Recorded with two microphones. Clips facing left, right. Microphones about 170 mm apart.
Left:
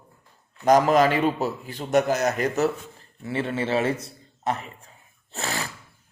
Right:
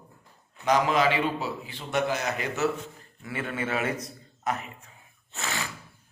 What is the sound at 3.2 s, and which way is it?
A man's voice, 30° left (ahead or behind).